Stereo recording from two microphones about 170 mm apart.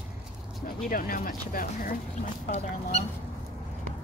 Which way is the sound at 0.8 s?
55° left (ahead or behind).